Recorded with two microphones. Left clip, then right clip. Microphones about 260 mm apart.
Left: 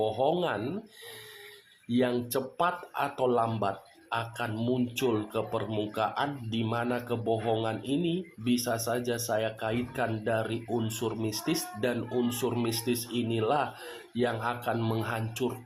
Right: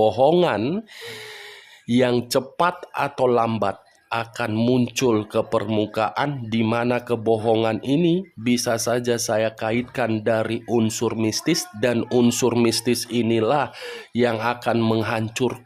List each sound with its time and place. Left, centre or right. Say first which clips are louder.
0.0 s speech: right 11 dB; right
1.9 s speech: right 9 dB; right